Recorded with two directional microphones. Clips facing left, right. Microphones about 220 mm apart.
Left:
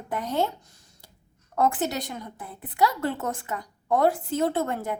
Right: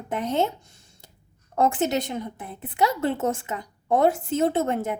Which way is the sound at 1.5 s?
25° right (ahead or behind).